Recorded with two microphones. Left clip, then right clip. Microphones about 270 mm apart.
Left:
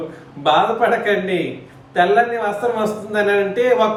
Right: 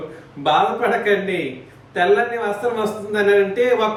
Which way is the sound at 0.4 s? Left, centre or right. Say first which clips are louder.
Left 2 dB; centre.